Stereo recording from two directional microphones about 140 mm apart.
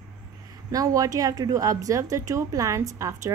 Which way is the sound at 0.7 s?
25° right (ahead or behind).